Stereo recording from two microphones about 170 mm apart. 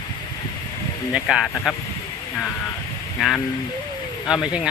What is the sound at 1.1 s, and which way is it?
Speech, 5° right (ahead or behind).